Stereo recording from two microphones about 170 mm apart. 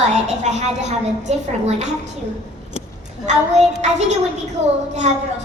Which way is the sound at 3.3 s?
40° right (ahead or behind).